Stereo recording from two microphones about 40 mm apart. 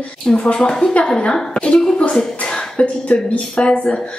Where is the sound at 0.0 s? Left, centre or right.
Left.